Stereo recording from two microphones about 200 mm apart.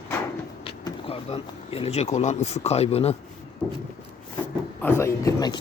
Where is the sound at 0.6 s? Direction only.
30° left (ahead or behind).